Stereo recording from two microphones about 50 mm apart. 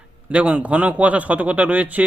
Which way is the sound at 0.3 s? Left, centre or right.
Right.